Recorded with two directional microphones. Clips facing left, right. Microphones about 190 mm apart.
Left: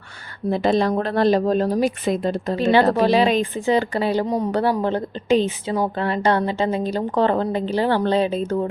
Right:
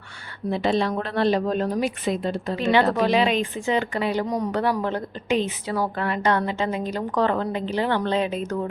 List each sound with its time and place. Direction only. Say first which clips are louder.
0.5 s speech: left 4 dB; 40° left (ahead or behind)